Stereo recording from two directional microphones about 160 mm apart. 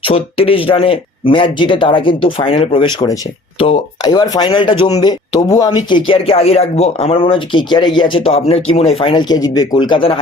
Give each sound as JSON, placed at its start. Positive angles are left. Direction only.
{"t": 0.0, "sound": "speech", "side_deg": 35}